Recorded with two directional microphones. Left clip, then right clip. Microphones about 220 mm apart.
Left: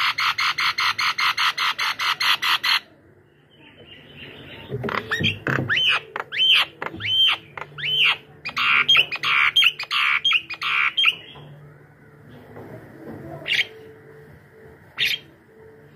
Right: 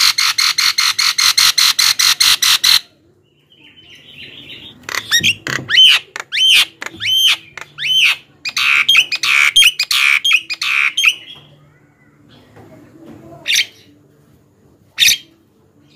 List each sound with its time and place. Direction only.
0.0 s music: 15° right (ahead or behind)
4.8 s rodents: 20° right (ahead or behind)
6.5 s a sound: 15° right (ahead or behind)
7.2 s alarm: 15° right (ahead or behind)
8.9 s bird: 15° right (ahead or behind)
13.4 s bird: 15° right (ahead or behind)